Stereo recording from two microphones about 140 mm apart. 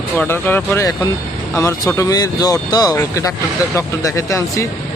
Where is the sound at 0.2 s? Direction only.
15° left (ahead or behind).